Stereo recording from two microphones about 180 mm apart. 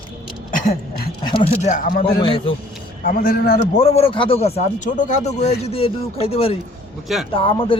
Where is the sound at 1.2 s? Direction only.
25° left (ahead or behind).